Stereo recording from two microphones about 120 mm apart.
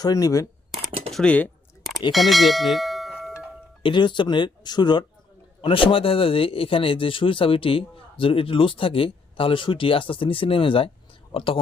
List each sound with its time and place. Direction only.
0.0 s speech: 30° left (ahead or behind)
1.1 s speech: 10° left (ahead or behind)
3.8 s speech: 40° left (ahead or behind)